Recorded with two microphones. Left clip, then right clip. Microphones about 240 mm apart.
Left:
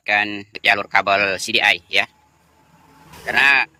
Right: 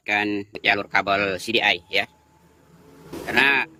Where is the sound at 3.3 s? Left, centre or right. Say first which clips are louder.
Left 4 dB; centre.